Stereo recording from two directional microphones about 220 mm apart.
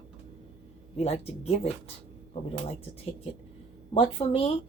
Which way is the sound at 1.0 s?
30° left (ahead or behind).